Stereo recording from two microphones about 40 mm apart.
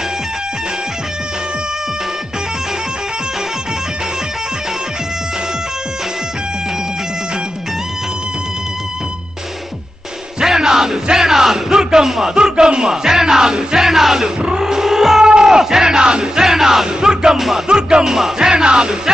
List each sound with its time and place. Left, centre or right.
10.4 s music: centre
14.4 s crowd: centre
16.4 s music: centre
17.6 s music: right